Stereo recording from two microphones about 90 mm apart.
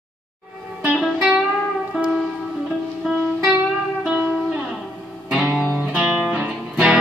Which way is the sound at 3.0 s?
5° right (ahead or behind).